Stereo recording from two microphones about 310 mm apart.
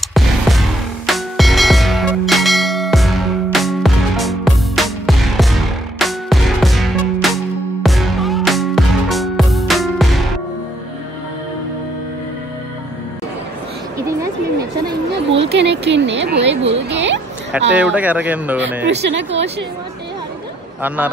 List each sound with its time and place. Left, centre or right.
0.0 s music: centre
13.9 s a sound: centre
15.5 s a sound: right
17.5 s speech: centre
18.9 s a woman's voice: right
20.8 s speech: centre